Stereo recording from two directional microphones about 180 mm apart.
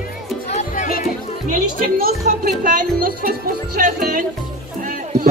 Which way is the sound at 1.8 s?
55° right (ahead or behind).